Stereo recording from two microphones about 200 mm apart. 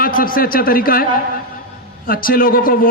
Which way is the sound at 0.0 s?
45° left (ahead or behind).